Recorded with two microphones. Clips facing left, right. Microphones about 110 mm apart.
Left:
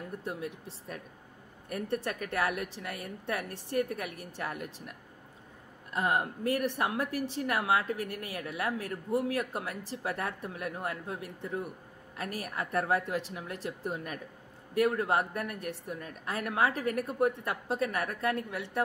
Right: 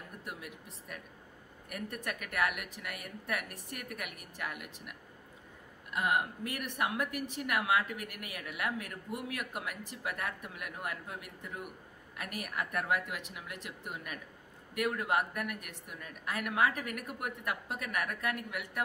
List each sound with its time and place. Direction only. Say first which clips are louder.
0.2 s a woman's voice: left 7 dB; 30° left (ahead or behind)